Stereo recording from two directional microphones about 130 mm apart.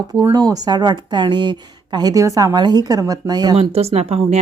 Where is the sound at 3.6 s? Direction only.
50° right (ahead or behind).